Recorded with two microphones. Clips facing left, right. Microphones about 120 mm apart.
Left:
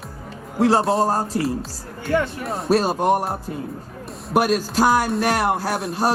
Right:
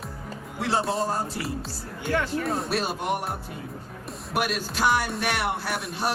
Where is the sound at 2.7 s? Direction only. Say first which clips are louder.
Left 9 dB; 40° left (ahead or behind).